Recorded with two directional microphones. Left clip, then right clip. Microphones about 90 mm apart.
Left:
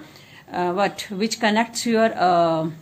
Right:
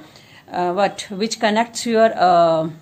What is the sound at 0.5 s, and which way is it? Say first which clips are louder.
A woman's voice: right 3 dB; 20° right (ahead or behind).